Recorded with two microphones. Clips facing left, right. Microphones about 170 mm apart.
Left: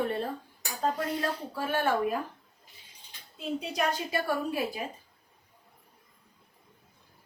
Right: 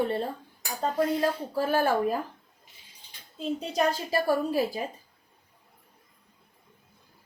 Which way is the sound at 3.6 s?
35° right (ahead or behind).